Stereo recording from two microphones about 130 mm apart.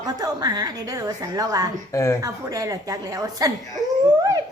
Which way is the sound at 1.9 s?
20° left (ahead or behind).